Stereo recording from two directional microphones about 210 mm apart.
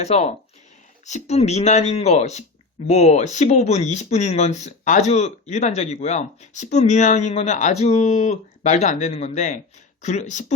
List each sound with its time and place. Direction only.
0.0 s speech: 30° left (ahead or behind)